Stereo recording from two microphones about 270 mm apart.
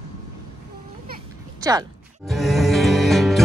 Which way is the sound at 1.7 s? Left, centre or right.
Centre.